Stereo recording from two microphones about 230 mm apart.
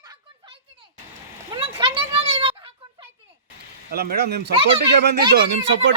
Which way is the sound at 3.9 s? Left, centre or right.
Right.